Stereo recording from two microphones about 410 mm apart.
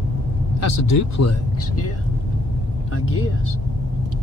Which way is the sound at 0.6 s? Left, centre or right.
Left.